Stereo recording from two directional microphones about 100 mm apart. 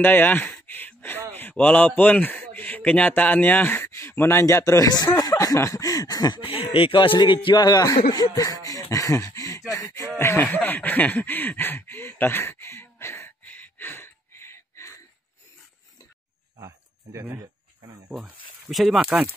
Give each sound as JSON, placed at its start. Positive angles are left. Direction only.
{"t": 0.0, "sound": "speech", "side_deg": 20}
{"t": 6.4, "sound": "speech", "side_deg": 65}
{"t": 7.2, "sound": "speech", "side_deg": 50}
{"t": 9.7, "sound": "a sound", "side_deg": 35}
{"t": 16.5, "sound": "a sound", "side_deg": -35}
{"t": 18.7, "sound": "speech", "side_deg": 0}
{"t": 19.0, "sound": "speech", "side_deg": -15}